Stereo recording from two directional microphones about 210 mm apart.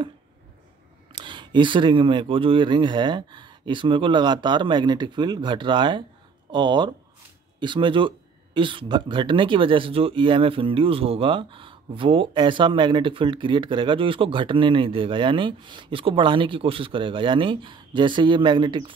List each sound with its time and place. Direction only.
1.1 s speech: 20° right (ahead or behind)